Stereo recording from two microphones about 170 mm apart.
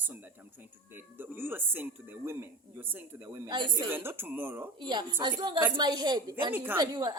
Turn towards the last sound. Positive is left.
turn(degrees=-25)  # may be behind; listen again after turning